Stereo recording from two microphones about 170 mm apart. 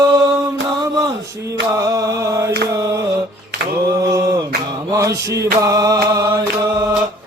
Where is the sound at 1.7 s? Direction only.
20° right (ahead or behind).